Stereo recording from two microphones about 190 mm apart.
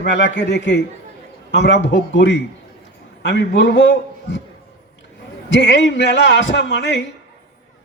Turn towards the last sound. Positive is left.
turn(degrees=65)  # may be behind; listen again after turning